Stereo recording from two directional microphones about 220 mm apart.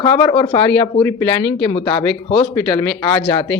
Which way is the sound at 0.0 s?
20° left (ahead or behind).